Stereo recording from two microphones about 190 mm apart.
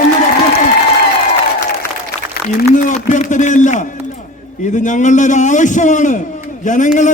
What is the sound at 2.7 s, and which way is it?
A man's voice, 40° left (ahead or behind).